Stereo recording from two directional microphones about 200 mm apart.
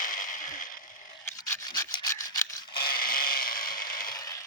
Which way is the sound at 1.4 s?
15° left (ahead or behind).